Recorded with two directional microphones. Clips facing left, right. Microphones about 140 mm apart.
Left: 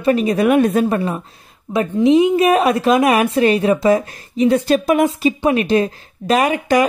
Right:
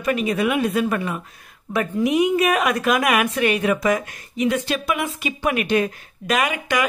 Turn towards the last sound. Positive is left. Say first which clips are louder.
# left 7 dB
turn(degrees=35)  # may be behind; listen again after turning